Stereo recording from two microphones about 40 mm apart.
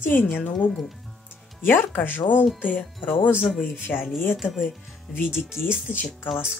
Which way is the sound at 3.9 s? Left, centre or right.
Left.